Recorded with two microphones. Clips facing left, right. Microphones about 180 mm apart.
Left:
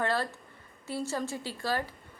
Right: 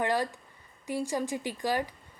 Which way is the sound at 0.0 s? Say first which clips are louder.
Right 2 dB; 15° right (ahead or behind).